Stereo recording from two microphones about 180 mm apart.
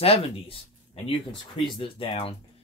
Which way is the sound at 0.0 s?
35° left (ahead or behind).